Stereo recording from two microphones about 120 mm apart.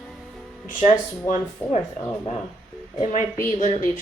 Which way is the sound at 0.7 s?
90° left.